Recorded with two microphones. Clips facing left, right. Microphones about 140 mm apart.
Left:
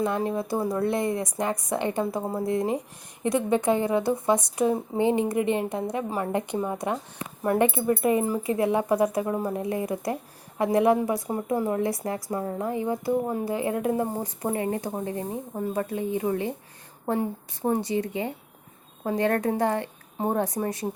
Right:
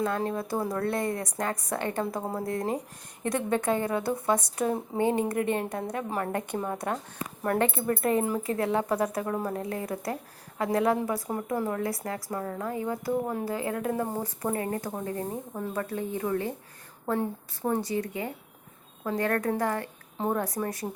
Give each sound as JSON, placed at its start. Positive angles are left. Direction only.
{"t": 0.0, "sound": "a woman's voice", "side_deg": 15}